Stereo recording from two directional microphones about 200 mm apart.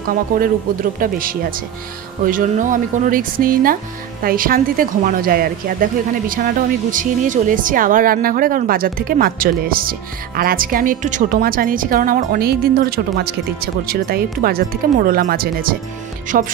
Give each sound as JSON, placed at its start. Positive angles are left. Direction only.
{"t": 0.9, "sound": "speech", "side_deg": -45}